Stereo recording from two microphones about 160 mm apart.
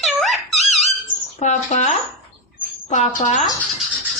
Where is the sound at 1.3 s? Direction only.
45° left (ahead or behind).